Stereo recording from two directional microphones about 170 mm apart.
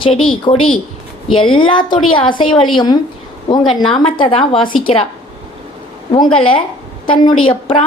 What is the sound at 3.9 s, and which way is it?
A woman's voice, 30° left (ahead or behind).